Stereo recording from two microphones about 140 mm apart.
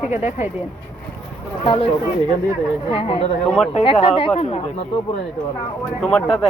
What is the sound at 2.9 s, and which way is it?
Speech, 40° left (ahead or behind).